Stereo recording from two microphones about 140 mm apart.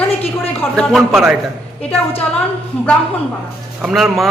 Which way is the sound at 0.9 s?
Centre (ahead or behind).